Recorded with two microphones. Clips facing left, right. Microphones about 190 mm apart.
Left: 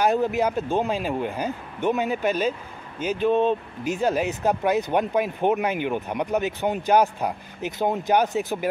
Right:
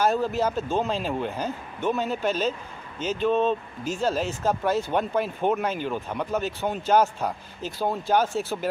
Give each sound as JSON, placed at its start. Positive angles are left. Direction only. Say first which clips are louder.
{"t": 0.0, "sound": "speech", "louder": "left 2 dB", "side_deg": 15}